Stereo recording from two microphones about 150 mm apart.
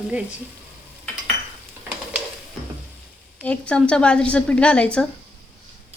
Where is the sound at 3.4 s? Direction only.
10° left (ahead or behind).